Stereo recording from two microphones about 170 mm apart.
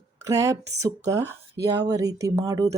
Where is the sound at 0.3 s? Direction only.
20° right (ahead or behind).